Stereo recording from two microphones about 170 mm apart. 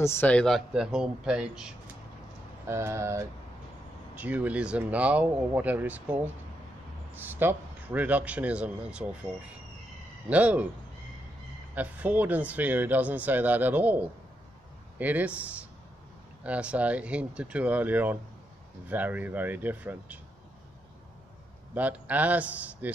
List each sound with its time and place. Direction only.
0.0 s speech: 15° left (ahead or behind); by 1.7 s 5° right (ahead or behind)
2.7 s speech: 15° right (ahead or behind)
10.3 s speech: 10° right (ahead or behind)
11.7 s speech: 10° right (ahead or behind)
21.7 s speech: 10° right (ahead or behind)